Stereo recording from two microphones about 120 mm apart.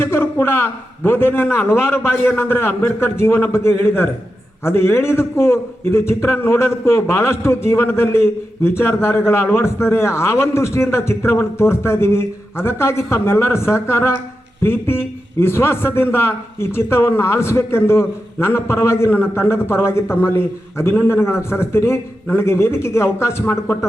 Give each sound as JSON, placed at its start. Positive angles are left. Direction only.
{"t": 0.0, "sound": "a man's voice", "side_deg": 20}